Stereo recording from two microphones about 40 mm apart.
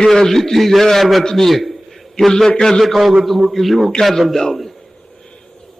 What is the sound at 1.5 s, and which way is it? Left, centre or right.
Speech, centre.